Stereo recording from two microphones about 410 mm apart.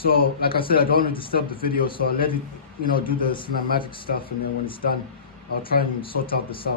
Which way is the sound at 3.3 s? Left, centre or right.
Centre.